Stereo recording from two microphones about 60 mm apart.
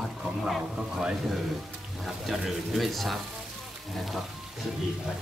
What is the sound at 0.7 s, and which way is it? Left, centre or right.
Speech, centre.